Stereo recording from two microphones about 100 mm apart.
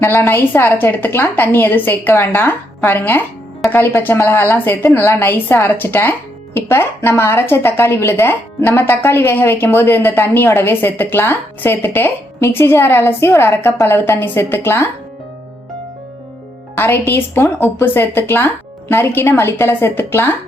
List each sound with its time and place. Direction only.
0.0 s speech: 25° left (ahead or behind)
16.7 s speech: 20° left (ahead or behind)